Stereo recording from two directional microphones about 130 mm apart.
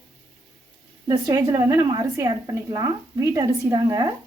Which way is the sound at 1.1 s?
30° right (ahead or behind).